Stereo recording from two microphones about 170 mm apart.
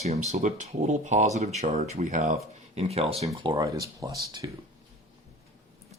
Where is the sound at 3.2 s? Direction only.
25° right (ahead or behind).